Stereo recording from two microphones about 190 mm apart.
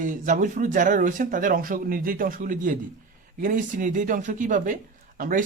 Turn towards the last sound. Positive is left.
turn(degrees=-45)  # may be behind; listen again after turning